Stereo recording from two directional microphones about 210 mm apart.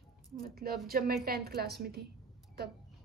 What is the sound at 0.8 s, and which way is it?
Speech, 45° right (ahead or behind).